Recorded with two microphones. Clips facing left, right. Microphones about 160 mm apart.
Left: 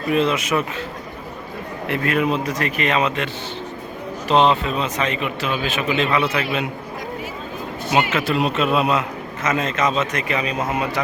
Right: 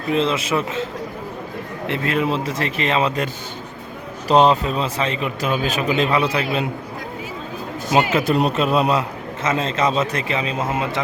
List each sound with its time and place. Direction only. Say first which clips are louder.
0.1 s speech: even; 25° right (ahead or behind)
1.9 s speech: left 1 dB; 25° right (ahead or behind)
4.3 s a man's voice: right 2 dB; 40° right (ahead or behind)
7.9 s a man's voice: right 2 dB; 40° right (ahead or behind)